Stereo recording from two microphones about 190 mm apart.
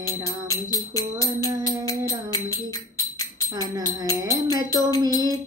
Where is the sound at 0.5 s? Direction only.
20° left (ahead or behind).